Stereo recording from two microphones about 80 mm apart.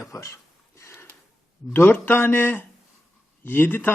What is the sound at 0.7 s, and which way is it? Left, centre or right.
Gasp, left.